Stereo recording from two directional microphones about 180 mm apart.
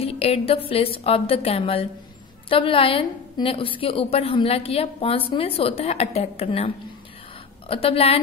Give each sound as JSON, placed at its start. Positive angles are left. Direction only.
{"t": 0.0, "sound": "a woman's voice", "side_deg": 35}